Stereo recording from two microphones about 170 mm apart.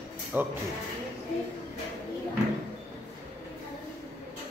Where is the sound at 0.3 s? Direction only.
10° right (ahead or behind).